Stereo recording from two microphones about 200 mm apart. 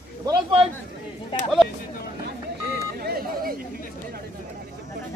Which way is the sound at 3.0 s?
50° right (ahead or behind).